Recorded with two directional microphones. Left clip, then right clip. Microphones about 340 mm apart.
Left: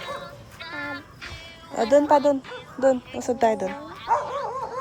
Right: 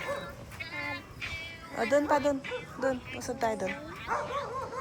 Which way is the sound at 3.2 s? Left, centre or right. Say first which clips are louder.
Left 9 dB; centre.